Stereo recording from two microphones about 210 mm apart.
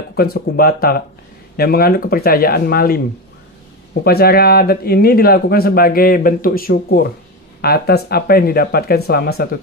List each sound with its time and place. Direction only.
0.1 s speech: 45° left (ahead or behind)
4.0 s speech: 45° left (ahead or behind)